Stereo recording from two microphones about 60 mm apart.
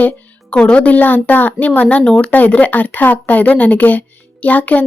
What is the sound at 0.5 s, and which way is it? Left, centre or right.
Speech, centre.